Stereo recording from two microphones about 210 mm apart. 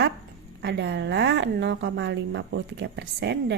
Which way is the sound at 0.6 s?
55° right (ahead or behind).